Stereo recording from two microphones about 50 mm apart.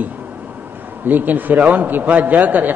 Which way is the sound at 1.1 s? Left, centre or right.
Right.